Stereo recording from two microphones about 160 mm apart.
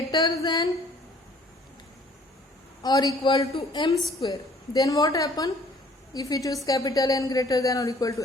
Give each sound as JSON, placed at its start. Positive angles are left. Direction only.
{"t": 0.1, "sound": "speech", "side_deg": 25}
{"t": 2.8, "sound": "speech", "side_deg": 25}